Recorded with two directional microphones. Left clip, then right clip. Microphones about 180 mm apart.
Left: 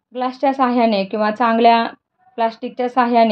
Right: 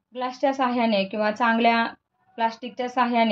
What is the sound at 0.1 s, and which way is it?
Speech, 40° left (ahead or behind).